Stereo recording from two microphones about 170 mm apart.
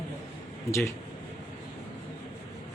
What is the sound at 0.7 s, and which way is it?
Speech, 15° left (ahead or behind).